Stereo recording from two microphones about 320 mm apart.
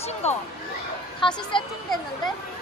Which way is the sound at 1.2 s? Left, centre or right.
Centre.